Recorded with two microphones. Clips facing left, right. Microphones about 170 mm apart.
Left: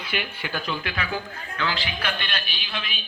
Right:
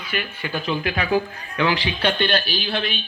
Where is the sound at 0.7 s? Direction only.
25° right (ahead or behind).